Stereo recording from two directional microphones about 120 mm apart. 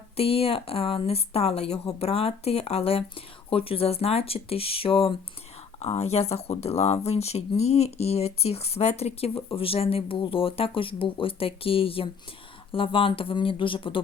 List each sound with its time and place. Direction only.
0.2 s speech: 55° left (ahead or behind)